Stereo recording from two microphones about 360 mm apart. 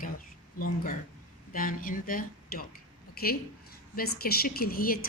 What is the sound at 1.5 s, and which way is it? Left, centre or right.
A woman's voice, left.